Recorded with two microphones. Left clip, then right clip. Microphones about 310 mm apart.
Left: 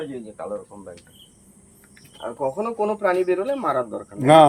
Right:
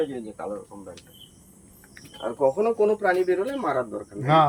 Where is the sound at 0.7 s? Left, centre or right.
Centre.